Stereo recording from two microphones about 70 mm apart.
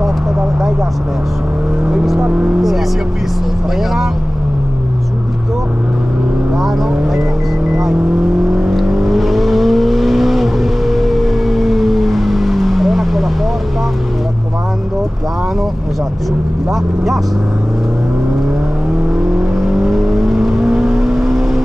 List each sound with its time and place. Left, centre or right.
1.9 s vehicle: centre
2.2 s speech: centre
8.5 s vehicle: centre
19.1 s vehicle: centre